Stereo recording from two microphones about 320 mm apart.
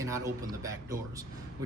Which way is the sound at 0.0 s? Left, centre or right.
Centre.